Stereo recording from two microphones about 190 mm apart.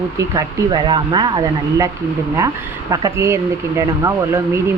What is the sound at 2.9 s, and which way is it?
Speech, 15° right (ahead or behind).